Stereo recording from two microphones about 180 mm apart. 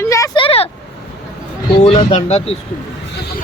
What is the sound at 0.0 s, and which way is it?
Vehicle, 15° left (ahead or behind).